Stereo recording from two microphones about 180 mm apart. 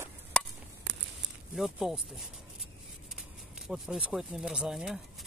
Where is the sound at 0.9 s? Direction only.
90° right.